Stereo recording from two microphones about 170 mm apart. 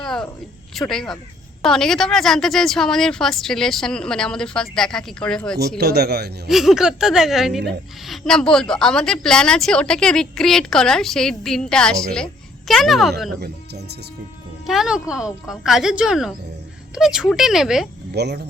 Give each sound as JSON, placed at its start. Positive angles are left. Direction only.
{"t": 0.0, "sound": "a sound", "side_deg": 5}
{"t": 0.7, "sound": "a woman's voice", "side_deg": 0}
{"t": 5.5, "sound": "speech", "side_deg": -70}
{"t": 6.5, "sound": "a woman's voice", "side_deg": 0}
{"t": 14.7, "sound": "a woman's voice", "side_deg": -5}
{"t": 18.1, "sound": "speech", "side_deg": -75}